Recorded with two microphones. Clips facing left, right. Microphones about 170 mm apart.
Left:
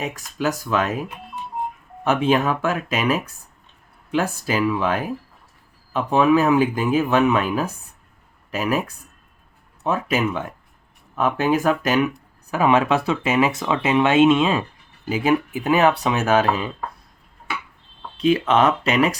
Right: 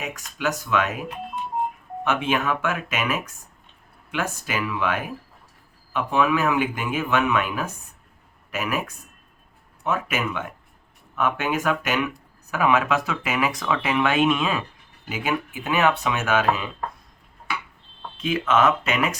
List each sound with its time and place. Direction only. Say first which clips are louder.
0.0 s speech: left 4 dB; 35° left (ahead or behind)
2.0 s speech: left 5 dB; 35° left (ahead or behind)
9.8 s speech: left 4 dB; 35° left (ahead or behind)
18.2 s speech: left 4 dB; 35° left (ahead or behind)